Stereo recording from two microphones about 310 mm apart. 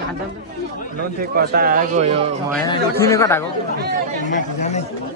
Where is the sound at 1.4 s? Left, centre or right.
Right.